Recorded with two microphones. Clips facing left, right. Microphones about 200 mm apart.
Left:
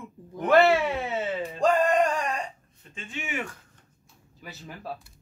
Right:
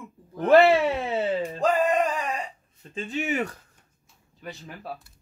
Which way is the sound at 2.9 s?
35° right (ahead or behind).